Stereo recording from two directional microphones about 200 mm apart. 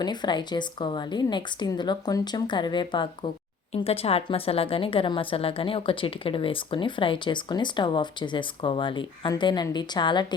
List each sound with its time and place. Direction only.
0.0 s a woman's voice: 20° left (ahead or behind)